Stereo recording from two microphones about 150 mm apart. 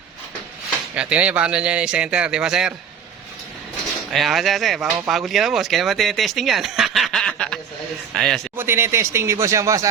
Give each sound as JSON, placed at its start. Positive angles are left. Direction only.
{"t": 0.9, "sound": "speech", "side_deg": -10}
{"t": 4.1, "sound": "speech", "side_deg": 0}
{"t": 8.5, "sound": "speech", "side_deg": -15}